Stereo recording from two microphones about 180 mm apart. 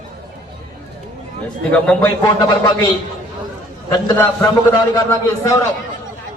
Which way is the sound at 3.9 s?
25° left (ahead or behind).